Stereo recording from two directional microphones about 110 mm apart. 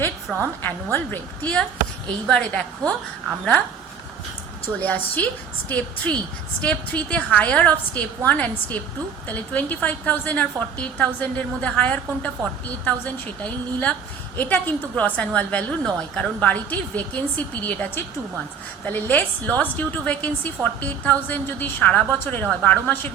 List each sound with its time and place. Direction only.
0.3 s a woman's voice: 10° left (ahead or behind)
4.8 s a woman's voice: 15° left (ahead or behind)